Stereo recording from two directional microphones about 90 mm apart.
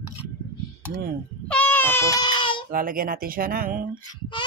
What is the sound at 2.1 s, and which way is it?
Baby cry, 50° left (ahead or behind).